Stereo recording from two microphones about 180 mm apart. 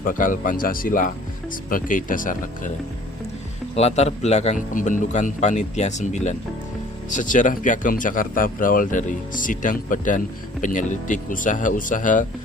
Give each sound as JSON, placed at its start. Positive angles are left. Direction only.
{"t": 0.0, "sound": "a man's voice", "side_deg": 50}
{"t": 3.8, "sound": "a man's voice", "side_deg": 35}